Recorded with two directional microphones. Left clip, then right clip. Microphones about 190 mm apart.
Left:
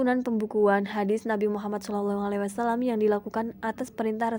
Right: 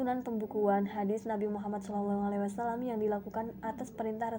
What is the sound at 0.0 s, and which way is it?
A woman's voice, 55° left (ahead or behind).